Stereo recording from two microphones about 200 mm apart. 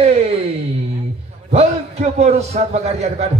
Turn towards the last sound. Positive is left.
turn(degrees=-35)  # may be behind; listen again after turning